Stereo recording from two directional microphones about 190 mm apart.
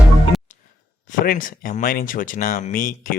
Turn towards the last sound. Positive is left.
turn(degrees=45)  # may be behind; listen again after turning